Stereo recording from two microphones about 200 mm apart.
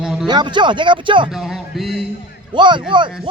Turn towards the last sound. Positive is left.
turn(degrees=-25)  # may be behind; listen again after turning